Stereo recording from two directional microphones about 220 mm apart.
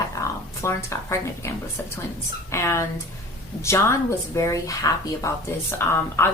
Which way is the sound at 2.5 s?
10° left (ahead or behind).